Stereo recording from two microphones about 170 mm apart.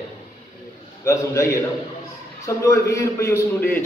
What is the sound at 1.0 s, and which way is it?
A man's voice, 15° left (ahead or behind).